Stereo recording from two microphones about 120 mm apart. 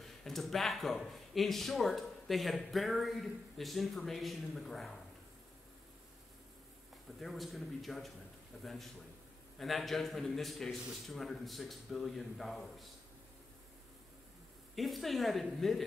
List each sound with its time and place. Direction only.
0.2 s speech: centre (ahead or behind)
7.2 s speech: centre (ahead or behind)
14.8 s speech: centre (ahead or behind)